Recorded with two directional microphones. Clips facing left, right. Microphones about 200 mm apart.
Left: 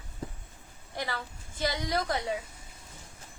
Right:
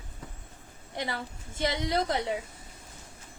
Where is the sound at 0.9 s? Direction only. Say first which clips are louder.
Right 2 dB; 20° right (ahead or behind).